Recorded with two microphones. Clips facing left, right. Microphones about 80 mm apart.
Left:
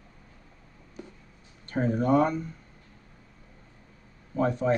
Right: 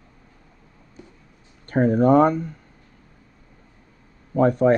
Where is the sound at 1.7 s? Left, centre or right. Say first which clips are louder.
Right 8 dB; right.